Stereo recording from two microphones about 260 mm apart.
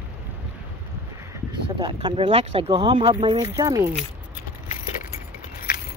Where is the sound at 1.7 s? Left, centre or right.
Centre.